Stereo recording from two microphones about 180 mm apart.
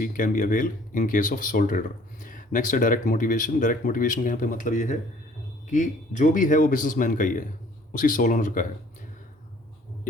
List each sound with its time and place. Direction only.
0.0 s speech: 50° left (ahead or behind)